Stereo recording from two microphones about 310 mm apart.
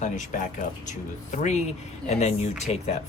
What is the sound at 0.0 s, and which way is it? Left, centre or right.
Speech, left.